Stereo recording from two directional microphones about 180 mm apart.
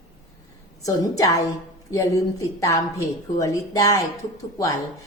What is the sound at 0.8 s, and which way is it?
A woman's voice, 20° left (ahead or behind).